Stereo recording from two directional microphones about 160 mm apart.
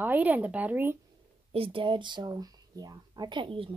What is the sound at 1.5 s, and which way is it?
Speech, 35° right (ahead or behind).